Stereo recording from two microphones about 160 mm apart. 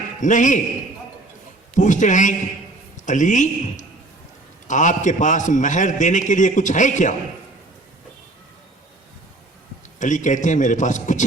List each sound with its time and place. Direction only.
0.2 s a man's voice: 50° left (ahead or behind)
1.7 s a man's voice: 50° left (ahead or behind)
10.0 s a man's voice: 50° left (ahead or behind)